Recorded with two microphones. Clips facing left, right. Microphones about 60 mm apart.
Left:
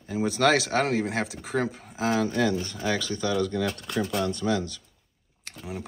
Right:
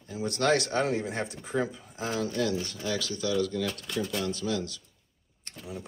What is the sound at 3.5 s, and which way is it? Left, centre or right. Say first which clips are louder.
Speech: left 3 dB; left.